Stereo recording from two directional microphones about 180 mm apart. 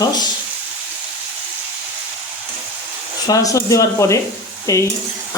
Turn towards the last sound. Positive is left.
turn(degrees=20)  # may be behind; listen again after turning